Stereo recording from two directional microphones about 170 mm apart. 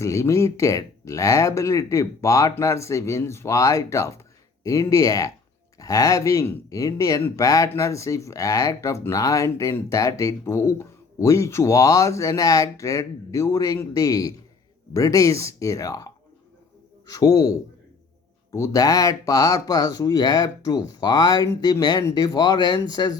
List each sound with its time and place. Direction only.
0.0 s speech: 15° left (ahead or behind)